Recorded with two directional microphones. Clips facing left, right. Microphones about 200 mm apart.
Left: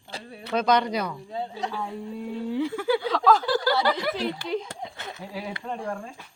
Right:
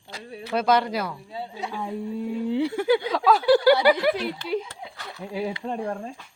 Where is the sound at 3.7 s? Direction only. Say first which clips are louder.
Right 6 dB; 10° right (ahead or behind).